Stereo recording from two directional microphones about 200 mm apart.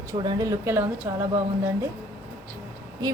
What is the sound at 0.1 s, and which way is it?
Speech, 20° right (ahead or behind).